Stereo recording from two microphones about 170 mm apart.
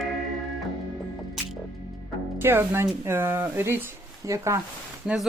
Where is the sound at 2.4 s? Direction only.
15° right (ahead or behind).